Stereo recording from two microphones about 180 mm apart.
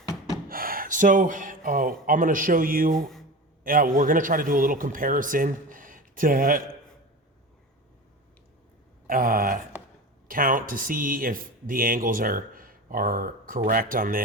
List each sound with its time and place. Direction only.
0.4 s speech: 55° right (ahead or behind)
2.9 s speech: centre (ahead or behind)
3.6 s speech: 50° right (ahead or behind)
9.0 s speech: 50° right (ahead or behind)